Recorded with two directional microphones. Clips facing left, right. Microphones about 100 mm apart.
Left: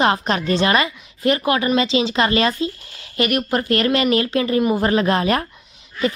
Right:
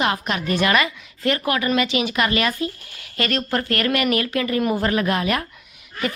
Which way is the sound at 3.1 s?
15° left (ahead or behind).